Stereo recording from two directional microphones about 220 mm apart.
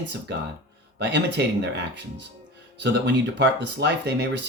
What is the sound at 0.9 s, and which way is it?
Speech, 55° right (ahead or behind).